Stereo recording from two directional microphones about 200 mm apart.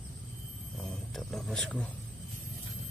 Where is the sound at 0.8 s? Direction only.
Centre (ahead or behind).